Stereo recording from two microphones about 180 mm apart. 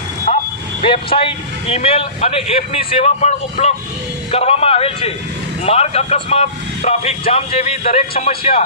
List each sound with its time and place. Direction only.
0.3 s vehicle: 35° left (ahead or behind)
0.8 s speech: 30° left (ahead or behind)